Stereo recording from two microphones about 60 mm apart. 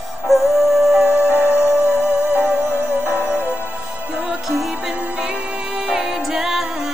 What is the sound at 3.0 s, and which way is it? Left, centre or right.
Music, right.